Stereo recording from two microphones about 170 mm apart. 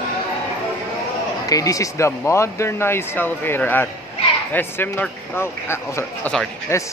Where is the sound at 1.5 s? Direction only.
20° left (ahead or behind).